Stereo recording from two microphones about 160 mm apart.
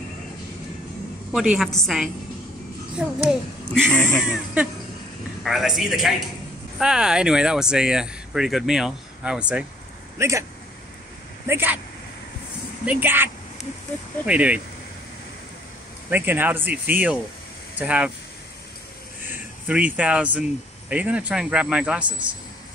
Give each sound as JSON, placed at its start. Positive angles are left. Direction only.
{"t": 1.3, "sound": "speech", "side_deg": -5}
{"t": 3.7, "sound": "speech", "side_deg": 5}
{"t": 4.2, "sound": "speech", "side_deg": -5}
{"t": 10.1, "sound": "speech", "side_deg": -20}
{"t": 11.4, "sound": "speech", "side_deg": -15}
{"t": 12.8, "sound": "speech", "side_deg": -10}
{"t": 16.1, "sound": "speech", "side_deg": -10}
{"t": 19.2, "sound": "speech", "side_deg": -10}